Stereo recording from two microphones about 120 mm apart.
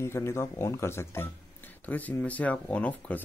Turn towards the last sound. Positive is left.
turn(degrees=10)  # may be behind; listen again after turning